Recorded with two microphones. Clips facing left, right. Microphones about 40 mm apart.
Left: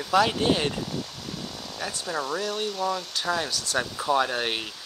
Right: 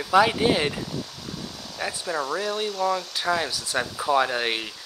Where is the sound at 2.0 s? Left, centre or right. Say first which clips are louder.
Right 1 dB; centre.